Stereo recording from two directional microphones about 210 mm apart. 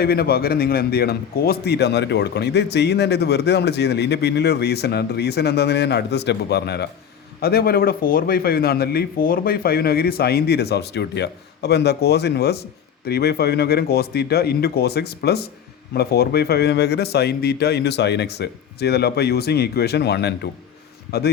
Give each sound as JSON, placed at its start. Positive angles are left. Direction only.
{"t": 0.0, "sound": "a man's voice", "side_deg": 45}